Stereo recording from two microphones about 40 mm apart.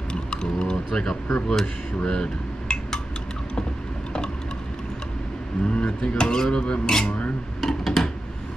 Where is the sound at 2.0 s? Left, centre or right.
Left.